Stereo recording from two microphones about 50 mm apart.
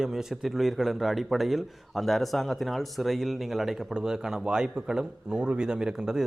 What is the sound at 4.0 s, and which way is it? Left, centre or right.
Speech, centre.